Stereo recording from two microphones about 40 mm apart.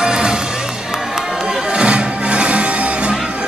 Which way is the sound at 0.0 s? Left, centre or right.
Centre.